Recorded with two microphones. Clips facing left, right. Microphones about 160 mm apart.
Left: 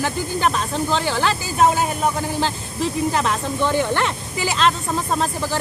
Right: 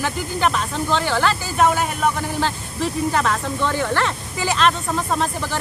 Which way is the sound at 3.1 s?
25° left (ahead or behind).